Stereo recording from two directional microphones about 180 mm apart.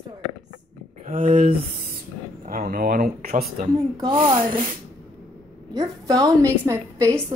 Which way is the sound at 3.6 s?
25° right (ahead or behind).